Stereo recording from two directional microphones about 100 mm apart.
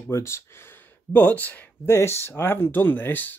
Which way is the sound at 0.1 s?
30° left (ahead or behind).